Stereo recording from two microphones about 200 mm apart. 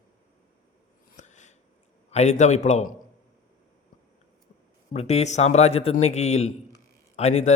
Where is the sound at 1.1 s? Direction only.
35° left (ahead or behind).